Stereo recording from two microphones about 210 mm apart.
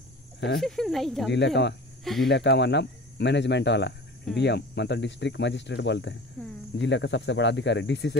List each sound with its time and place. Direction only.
0.6 s speech: centre (ahead or behind)
1.3 s speech: 55° left (ahead or behind)
6.4 s speech: 5° left (ahead or behind)
6.8 s speech: 60° left (ahead or behind)